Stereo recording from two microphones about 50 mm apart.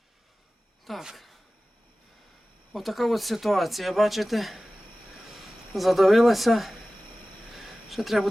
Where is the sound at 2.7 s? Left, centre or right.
Centre.